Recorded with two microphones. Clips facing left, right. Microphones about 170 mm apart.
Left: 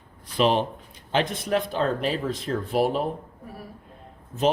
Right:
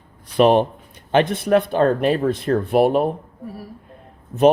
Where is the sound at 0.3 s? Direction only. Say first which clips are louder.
Right 7 dB; 55° right (ahead or behind).